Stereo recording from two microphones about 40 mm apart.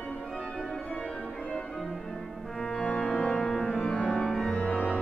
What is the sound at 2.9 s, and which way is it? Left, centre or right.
Music, centre.